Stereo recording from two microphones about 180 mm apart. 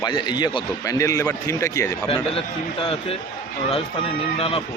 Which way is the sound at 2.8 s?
30° left (ahead or behind).